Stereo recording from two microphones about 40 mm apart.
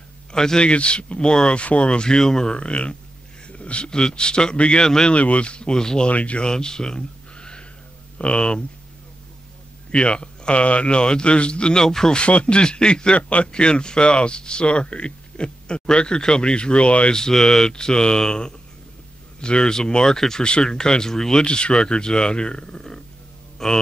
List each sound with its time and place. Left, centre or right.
0.3 s speech: centre
2.5 s speech: left
3.4 s a sound: left
3.9 s speech: left
5.1 s speech: left
6.0 s speech: left
6.5 s a sound: centre
8.2 s speech: left
9.8 s speech: left
11.8 s speech: centre
12.2 s speech: left
13.2 s speech: left
13.5 s speech: left
17.2 s speech: centre